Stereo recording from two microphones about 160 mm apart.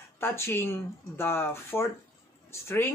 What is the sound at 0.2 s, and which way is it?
Speech, 15° left (ahead or behind).